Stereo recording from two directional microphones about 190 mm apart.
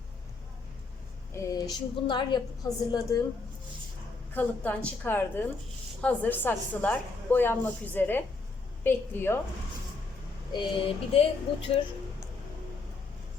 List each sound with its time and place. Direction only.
1.3 s a woman's voice: 15° left (ahead or behind)
4.4 s a woman's voice: 10° left (ahead or behind)
10.5 s a woman's voice: 25° left (ahead or behind)